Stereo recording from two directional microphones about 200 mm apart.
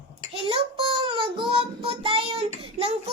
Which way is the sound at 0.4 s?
25° right (ahead or behind).